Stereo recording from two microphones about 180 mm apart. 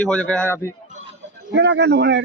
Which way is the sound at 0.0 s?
5° left (ahead or behind).